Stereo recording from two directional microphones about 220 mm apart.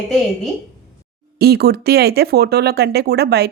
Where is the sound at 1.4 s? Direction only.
45° right (ahead or behind).